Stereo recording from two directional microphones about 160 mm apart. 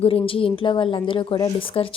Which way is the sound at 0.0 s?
35° left (ahead or behind).